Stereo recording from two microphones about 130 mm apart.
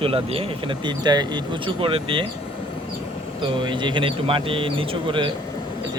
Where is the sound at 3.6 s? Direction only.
35° right (ahead or behind).